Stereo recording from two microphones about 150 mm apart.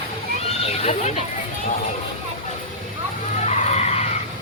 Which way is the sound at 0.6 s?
45° left (ahead or behind).